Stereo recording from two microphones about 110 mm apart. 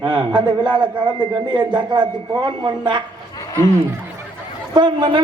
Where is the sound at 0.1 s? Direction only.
45° right (ahead or behind).